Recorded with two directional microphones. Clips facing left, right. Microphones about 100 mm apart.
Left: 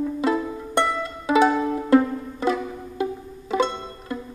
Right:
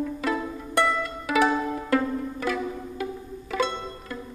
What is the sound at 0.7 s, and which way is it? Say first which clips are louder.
Pizzicato: left 1 dB; 25° left (ahead or behind).